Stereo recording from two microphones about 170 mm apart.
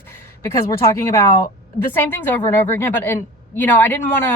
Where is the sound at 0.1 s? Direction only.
20° left (ahead or behind).